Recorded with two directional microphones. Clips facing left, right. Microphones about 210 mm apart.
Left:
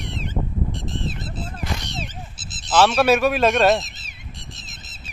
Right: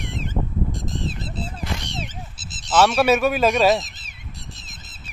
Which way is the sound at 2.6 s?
Centre (ahead or behind).